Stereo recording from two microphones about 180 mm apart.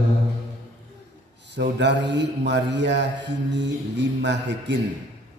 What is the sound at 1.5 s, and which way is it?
A man's voice, 75° right (ahead or behind).